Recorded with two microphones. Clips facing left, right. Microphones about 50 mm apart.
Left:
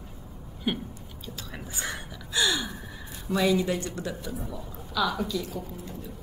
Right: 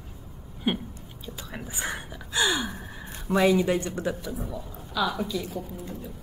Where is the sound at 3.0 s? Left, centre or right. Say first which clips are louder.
Right 3 dB; right.